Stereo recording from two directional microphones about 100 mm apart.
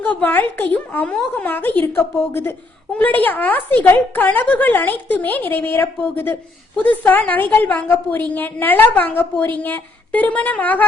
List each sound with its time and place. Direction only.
0.0 s a woman's voice: 15° left (ahead or behind)